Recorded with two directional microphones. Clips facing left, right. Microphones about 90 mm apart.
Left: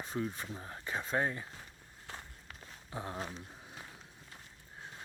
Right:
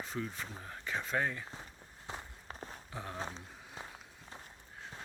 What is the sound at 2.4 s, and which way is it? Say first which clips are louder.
Walk: right 6 dB; 35° right (ahead or behind).